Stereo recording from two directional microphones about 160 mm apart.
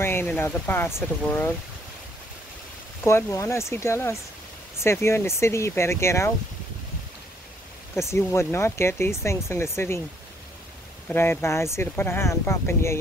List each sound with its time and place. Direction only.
0.0 s speech: 15° left (ahead or behind)
3.0 s speech: 15° left (ahead or behind)
7.9 s speech: 15° left (ahead or behind)
11.1 s speech: 15° left (ahead or behind)